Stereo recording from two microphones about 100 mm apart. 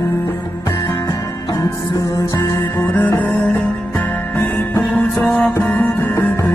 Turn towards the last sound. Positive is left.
turn(degrees=30)  # may be behind; listen again after turning